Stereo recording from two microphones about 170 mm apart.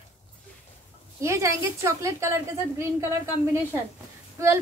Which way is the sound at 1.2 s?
15° right (ahead or behind).